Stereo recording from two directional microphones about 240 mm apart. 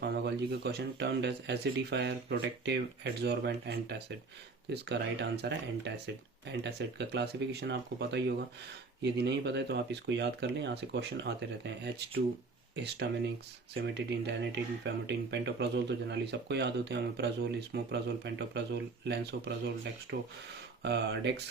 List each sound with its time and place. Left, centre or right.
0.0 s speech: right